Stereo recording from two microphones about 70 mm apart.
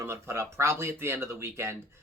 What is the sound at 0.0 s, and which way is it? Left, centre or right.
Speech, right.